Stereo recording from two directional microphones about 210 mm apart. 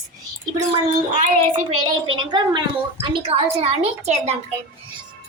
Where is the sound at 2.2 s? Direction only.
20° right (ahead or behind).